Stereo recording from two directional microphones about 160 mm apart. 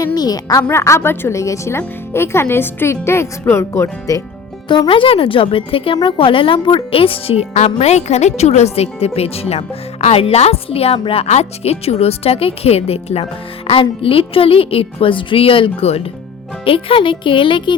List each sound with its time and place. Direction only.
0.0 s a woman's voice: 25° left (ahead or behind)
4.7 s a woman's voice: 30° left (ahead or behind)